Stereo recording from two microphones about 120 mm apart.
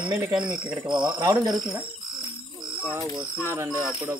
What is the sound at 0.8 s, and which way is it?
Speech, 40° right (ahead or behind).